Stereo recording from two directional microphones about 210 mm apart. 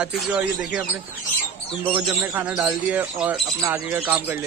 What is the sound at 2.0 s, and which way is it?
Speech, 5° right (ahead or behind).